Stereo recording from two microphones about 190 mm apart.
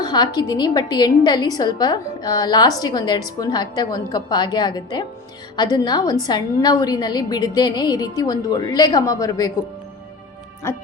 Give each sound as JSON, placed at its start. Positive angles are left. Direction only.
{"t": 0.0, "sound": "a woman's voice", "side_deg": 20}